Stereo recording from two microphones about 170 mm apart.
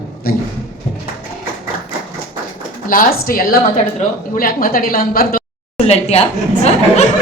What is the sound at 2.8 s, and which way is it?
A woman's voice, 55° left (ahead or behind).